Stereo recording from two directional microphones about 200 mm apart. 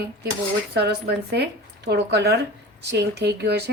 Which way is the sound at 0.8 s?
55° right (ahead or behind).